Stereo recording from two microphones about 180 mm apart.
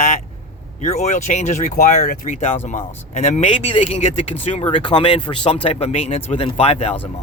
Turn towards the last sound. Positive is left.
turn(degrees=35)  # may be behind; listen again after turning